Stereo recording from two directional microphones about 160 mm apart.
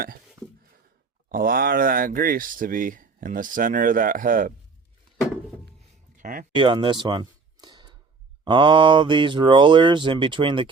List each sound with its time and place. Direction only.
1.3 s speech: 65° right (ahead or behind)
6.1 s speech: 55° right (ahead or behind)
6.5 s a sound: 30° right (ahead or behind)
8.4 s speech: 30° right (ahead or behind)